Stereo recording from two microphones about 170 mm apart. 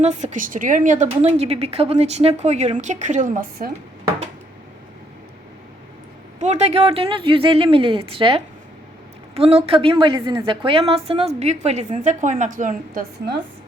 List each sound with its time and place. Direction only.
0.0 s a woman's voice: 45° right (ahead or behind)
6.4 s a woman's voice: 40° right (ahead or behind)